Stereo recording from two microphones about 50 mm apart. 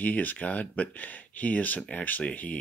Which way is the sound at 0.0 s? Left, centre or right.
Left.